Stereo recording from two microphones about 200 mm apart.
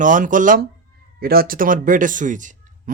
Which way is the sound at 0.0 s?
40° right (ahead or behind).